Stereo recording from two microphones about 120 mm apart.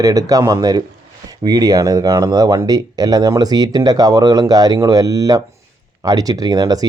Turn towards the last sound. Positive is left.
turn(degrees=-30)  # may be behind; listen again after turning